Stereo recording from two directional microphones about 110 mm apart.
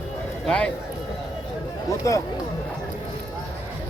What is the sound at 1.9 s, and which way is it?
Speech, 30° left (ahead or behind).